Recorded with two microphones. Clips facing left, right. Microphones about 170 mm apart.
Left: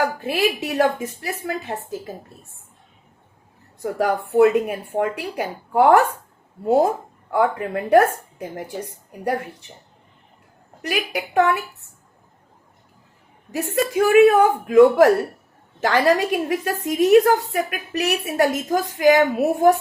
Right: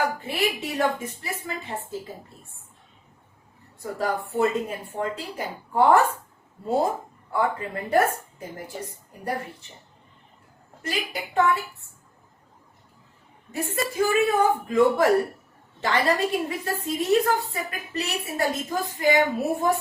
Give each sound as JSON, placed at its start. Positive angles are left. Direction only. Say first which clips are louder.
{"t": 0.2, "sound": "a woman's voice", "louder": "left 5 dB", "side_deg": 70}
{"t": 3.9, "sound": "a woman's voice", "louder": "left 8 dB", "side_deg": 75}
{"t": 7.3, "sound": "a woman's voice", "louder": "left 5 dB", "side_deg": 70}
{"t": 10.8, "sound": "a woman's voice", "louder": "left 5 dB", "side_deg": 75}
{"t": 13.5, "sound": "a woman's voice", "louder": "left 6 dB", "side_deg": 75}